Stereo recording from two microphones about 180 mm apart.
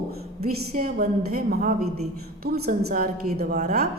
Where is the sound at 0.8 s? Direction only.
55° right (ahead or behind).